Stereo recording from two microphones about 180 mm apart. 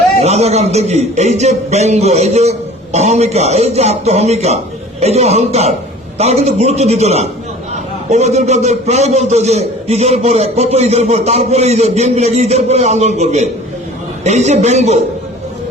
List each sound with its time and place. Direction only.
0.2 s a man's voice: 35° right (ahead or behind)